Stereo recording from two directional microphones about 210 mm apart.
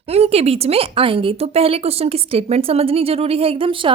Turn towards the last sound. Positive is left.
turn(degrees=-25)  # may be behind; listen again after turning